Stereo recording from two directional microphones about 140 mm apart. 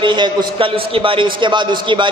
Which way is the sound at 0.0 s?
35° right (ahead or behind).